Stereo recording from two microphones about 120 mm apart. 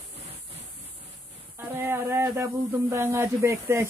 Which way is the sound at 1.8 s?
20° right (ahead or behind).